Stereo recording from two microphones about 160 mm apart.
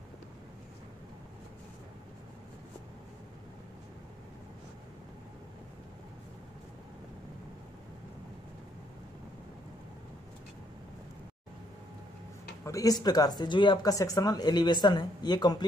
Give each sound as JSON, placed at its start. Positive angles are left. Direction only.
{"t": 12.6, "sound": "speech", "side_deg": 20}